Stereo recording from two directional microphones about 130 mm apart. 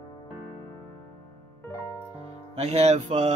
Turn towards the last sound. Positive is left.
turn(degrees=-60)  # may be behind; listen again after turning